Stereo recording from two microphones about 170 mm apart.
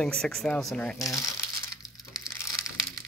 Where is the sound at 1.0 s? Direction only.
20° left (ahead or behind).